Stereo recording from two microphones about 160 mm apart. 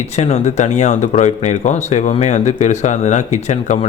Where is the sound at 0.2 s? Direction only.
45° left (ahead or behind).